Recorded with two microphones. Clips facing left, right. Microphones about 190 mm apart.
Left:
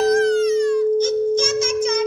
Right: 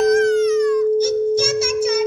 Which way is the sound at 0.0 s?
35° left (ahead or behind).